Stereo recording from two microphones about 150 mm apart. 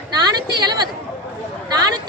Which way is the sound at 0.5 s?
30° right (ahead or behind).